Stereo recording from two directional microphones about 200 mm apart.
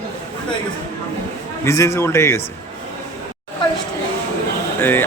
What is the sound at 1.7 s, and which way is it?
Speech, 15° left (ahead or behind).